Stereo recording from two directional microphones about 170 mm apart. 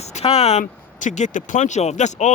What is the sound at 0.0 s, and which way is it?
Speech, 40° left (ahead or behind).